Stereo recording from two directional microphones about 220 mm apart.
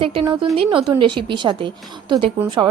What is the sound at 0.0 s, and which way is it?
A woman's voice, 25° right (ahead or behind).